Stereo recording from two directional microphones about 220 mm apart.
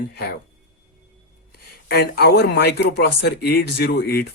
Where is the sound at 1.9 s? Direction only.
45° left (ahead or behind).